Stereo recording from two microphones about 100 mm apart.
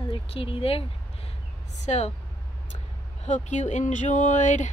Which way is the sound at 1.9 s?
90° left.